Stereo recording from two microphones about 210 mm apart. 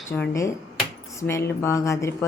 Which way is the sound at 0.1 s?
15° left (ahead or behind).